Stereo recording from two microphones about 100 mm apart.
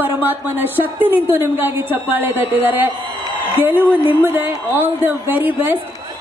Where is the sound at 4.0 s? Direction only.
20° right (ahead or behind).